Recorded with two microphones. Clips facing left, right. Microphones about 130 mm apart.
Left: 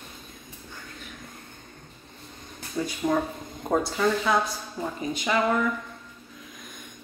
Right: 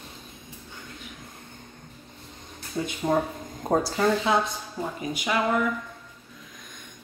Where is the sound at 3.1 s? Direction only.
30° right (ahead or behind).